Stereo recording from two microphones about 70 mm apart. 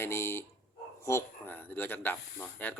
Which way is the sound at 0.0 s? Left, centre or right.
Left.